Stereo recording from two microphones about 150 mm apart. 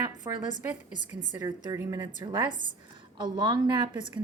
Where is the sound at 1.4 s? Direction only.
25° right (ahead or behind).